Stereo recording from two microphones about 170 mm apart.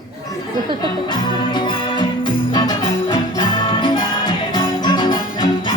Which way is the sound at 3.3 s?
25° left (ahead or behind).